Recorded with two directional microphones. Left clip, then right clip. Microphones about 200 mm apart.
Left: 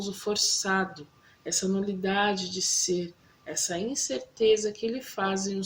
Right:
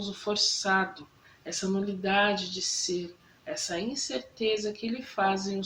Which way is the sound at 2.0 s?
45° left (ahead or behind).